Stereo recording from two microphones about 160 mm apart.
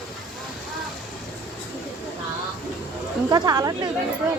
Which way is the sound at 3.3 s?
25° right (ahead or behind).